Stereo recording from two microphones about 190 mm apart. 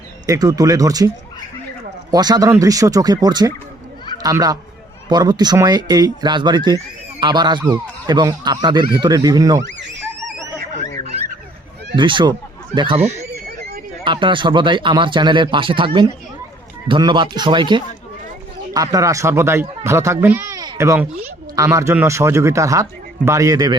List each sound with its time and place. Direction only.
0.3 s a man's voice: 20° right (ahead or behind)
11.9 s speech: 25° right (ahead or behind)
14.0 s a man's voice: 25° right (ahead or behind)